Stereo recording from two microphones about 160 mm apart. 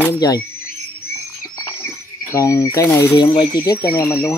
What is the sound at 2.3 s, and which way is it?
Speech, 20° left (ahead or behind).